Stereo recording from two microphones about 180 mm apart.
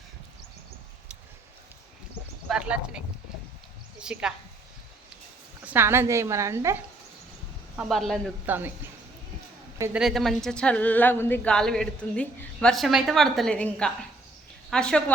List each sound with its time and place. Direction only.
2.5 s speech: 5° right (ahead or behind)
4.0 s speech: 5° right (ahead or behind)
5.6 s a woman's voice: 10° right (ahead or behind)
7.8 s speech: centre (ahead or behind)
8.4 s a woman's voice: 10° right (ahead or behind)
9.7 s speech: 15° right (ahead or behind)
10.0 s speech: centre (ahead or behind)